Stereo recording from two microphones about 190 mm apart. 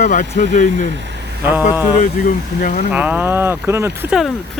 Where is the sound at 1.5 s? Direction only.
10° right (ahead or behind).